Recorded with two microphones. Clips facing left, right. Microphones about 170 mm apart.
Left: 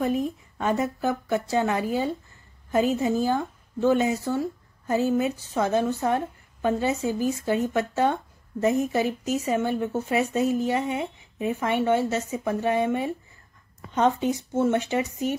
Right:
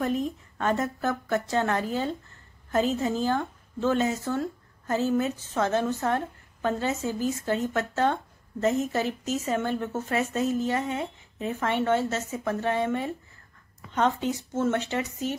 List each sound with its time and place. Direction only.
0.0 s a woman's voice: 10° left (ahead or behind)